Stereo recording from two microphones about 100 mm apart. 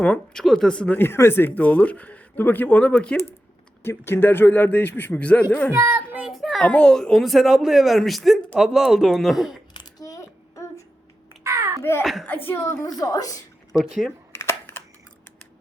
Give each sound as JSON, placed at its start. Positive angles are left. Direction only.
{"t": 0.0, "sound": "speech", "side_deg": 15}
{"t": 0.4, "sound": "speech", "side_deg": 0}
{"t": 0.9, "sound": "speech", "side_deg": 25}
{"t": 3.8, "sound": "a man's voice", "side_deg": 25}
{"t": 5.7, "sound": "child singing", "side_deg": -20}
{"t": 6.2, "sound": "a sound", "side_deg": 0}
{"t": 6.7, "sound": "speech", "side_deg": 10}
{"t": 9.7, "sound": "a sound", "side_deg": 35}
{"t": 11.4, "sound": "a sound", "side_deg": -30}
{"t": 11.8, "sound": "a child's voice", "side_deg": 25}
{"t": 12.8, "sound": "a woman's voice", "side_deg": 40}
{"t": 14.3, "sound": "camera", "side_deg": 25}